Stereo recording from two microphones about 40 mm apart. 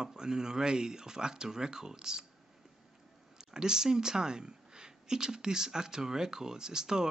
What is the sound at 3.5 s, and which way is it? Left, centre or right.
Speech, centre.